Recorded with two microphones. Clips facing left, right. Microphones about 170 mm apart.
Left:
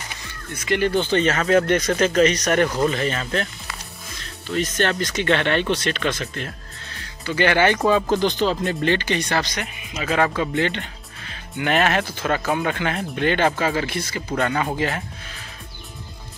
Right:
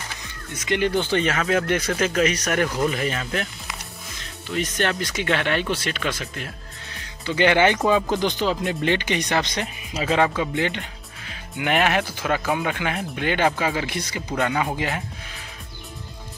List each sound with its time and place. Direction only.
0.7 s speech: 15° right (ahead or behind)
7.2 s speech: 20° right (ahead or behind)
10.3 s speech: 10° right (ahead or behind)